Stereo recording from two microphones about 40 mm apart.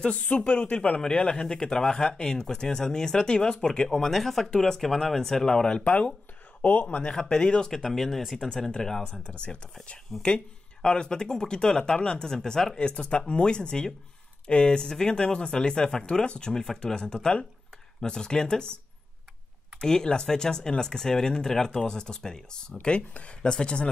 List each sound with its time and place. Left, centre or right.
0.0 s speech: left
1.0 s speech: centre
4.1 s speech: centre
6.6 s speech: left
7.0 s speech: left
7.7 s speech: centre
8.4 s speech: centre
10.2 s speech: left
12.8 s speech: left
19.8 s speech: centre